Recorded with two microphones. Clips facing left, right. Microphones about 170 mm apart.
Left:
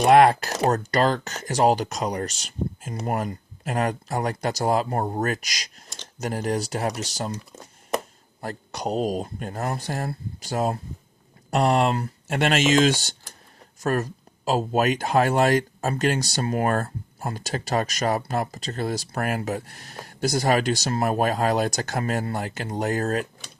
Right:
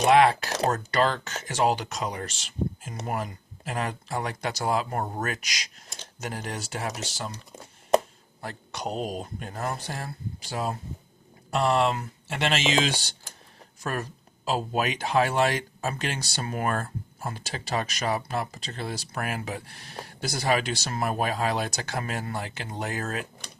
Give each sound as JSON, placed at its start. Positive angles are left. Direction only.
{"t": 0.1, "sound": "speech", "side_deg": 45}
{"t": 8.4, "sound": "speech", "side_deg": 40}